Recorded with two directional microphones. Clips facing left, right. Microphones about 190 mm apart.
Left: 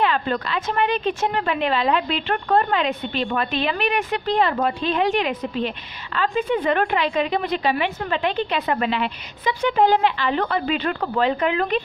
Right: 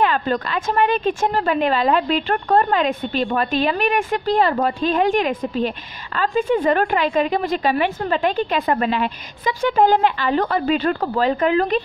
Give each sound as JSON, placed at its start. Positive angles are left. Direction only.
{"t": 0.0, "sound": "speech", "side_deg": -45}